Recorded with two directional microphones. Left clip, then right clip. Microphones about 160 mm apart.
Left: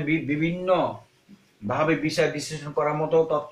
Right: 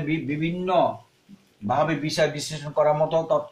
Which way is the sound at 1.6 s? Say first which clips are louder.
Right 1 dB; 55° right (ahead or behind).